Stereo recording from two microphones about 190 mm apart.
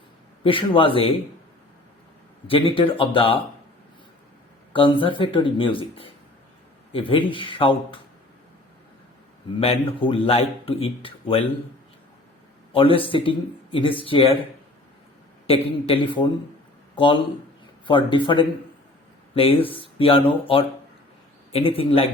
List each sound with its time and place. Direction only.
0.4 s a man's voice: 25° left (ahead or behind)
2.5 s a man's voice: 30° left (ahead or behind)
4.7 s a man's voice: 25° left (ahead or behind)
9.6 s a man's voice: 30° left (ahead or behind)
13.0 s a man's voice: 25° left (ahead or behind)
15.4 s a man's voice: 25° left (ahead or behind)
21.5 s a man's voice: 30° left (ahead or behind)